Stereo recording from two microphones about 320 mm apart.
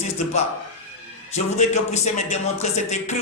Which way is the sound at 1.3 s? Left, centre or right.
Left.